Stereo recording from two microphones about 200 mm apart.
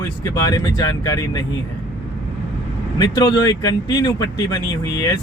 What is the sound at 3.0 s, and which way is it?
Speech, 15° left (ahead or behind).